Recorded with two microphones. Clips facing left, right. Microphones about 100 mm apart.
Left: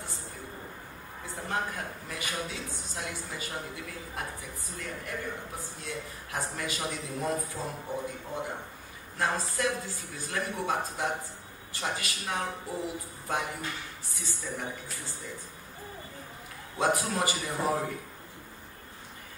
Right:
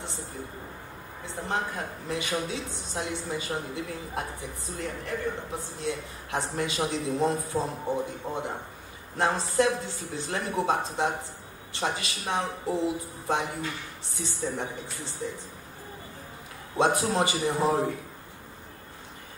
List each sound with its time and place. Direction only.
1.2 s a woman's voice: 25° right (ahead or behind)
16.7 s a woman's voice: 25° right (ahead or behind)